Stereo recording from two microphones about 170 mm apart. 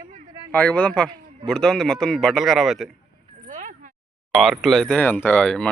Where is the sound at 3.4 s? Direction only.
50° right (ahead or behind).